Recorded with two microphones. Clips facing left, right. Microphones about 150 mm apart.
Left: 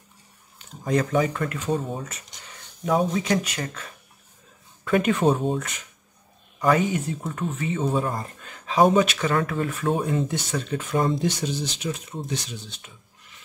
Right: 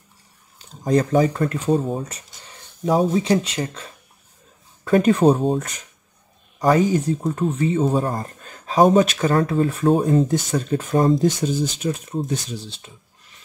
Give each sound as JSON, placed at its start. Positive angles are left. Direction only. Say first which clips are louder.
{"t": 0.6, "sound": "speech", "louder": "right 5 dB", "side_deg": -35}